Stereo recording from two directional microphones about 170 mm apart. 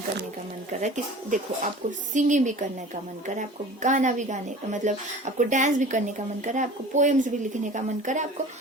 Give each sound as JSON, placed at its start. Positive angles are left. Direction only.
{"t": 0.7, "sound": "speech", "side_deg": -45}